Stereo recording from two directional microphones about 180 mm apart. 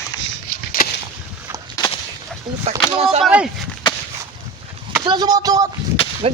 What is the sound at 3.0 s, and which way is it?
Speech, 35° right (ahead or behind).